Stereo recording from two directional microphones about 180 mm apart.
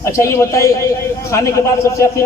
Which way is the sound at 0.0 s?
15° left (ahead or behind).